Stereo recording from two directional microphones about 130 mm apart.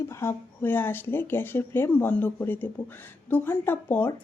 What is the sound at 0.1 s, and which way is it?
Speech, 20° left (ahead or behind).